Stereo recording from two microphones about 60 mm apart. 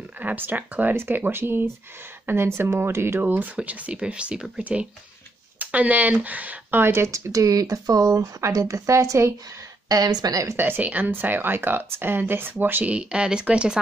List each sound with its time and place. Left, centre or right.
0.2 s speech: right
3.2 s speech: right
3.5 s speech: right
6.8 s speech: right
7.1 s speech: right
9.8 s speech: right
10.5 s speech: right
10.8 s speech: right
12.8 s speech: centre